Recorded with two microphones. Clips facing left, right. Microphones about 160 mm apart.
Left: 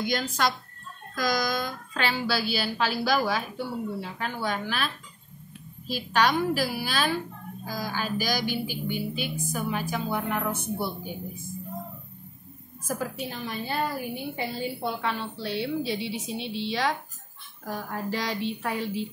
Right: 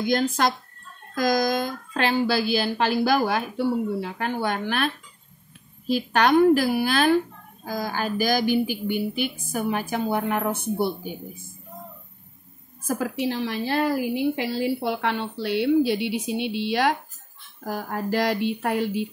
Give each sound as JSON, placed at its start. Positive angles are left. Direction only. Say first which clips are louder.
{"t": 0.0, "sound": "a woman's voice", "louder": "right 5 dB", "side_deg": -50}
{"t": 12.8, "sound": "a woman's voice", "louder": "right 6 dB", "side_deg": -60}